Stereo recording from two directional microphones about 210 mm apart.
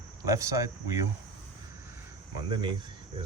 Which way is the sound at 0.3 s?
15° right (ahead or behind).